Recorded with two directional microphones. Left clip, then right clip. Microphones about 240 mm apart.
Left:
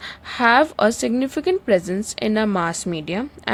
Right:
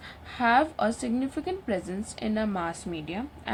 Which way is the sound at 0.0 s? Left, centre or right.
Left.